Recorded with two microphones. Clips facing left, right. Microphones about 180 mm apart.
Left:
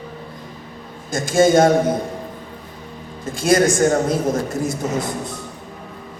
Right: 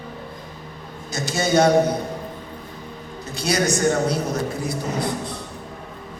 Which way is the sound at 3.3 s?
50° left (ahead or behind).